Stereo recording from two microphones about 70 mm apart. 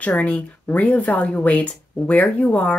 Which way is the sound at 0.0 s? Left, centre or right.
Centre.